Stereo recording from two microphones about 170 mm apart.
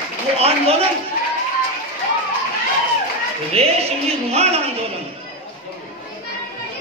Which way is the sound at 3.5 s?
35° right (ahead or behind).